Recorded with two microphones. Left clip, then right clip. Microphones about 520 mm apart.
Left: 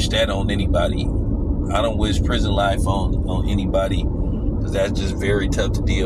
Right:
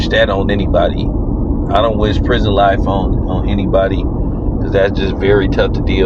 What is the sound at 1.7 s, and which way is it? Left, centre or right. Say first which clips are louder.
Speech: right 8 dB; left.